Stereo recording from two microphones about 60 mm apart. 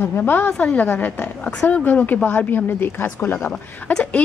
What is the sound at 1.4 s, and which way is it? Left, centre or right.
Speech, centre.